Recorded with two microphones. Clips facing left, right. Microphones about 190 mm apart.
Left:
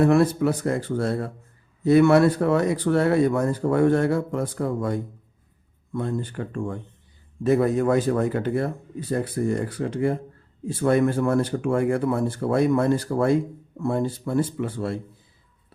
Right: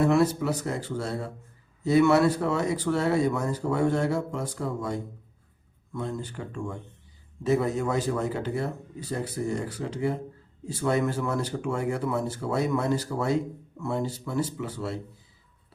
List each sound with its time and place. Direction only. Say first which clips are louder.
0.0 s speech: left 4 dB; 55° left (ahead or behind)